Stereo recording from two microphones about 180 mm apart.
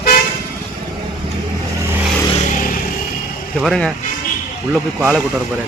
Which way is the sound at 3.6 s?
Centre (ahead or behind).